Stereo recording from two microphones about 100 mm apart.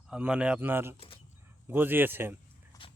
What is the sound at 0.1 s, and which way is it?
Speech, 10° right (ahead or behind).